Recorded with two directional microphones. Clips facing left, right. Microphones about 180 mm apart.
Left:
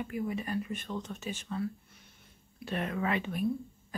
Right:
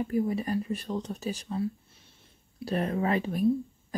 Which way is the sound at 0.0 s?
35° right (ahead or behind).